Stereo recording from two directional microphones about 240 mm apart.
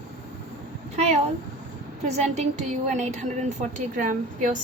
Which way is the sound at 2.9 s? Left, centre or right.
Right.